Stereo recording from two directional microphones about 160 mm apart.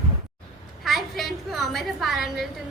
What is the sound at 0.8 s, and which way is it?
A woman's voice, centre (ahead or behind).